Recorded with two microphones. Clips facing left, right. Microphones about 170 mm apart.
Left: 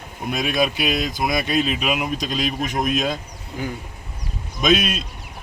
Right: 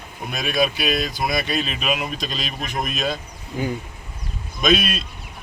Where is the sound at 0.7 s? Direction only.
15° left (ahead or behind).